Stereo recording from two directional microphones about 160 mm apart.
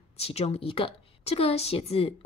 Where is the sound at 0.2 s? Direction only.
40° left (ahead or behind).